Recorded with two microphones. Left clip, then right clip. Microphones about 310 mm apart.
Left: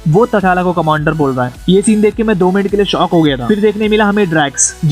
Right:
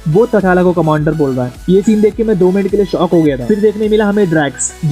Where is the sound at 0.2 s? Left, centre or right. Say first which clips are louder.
Right 1 dB; left.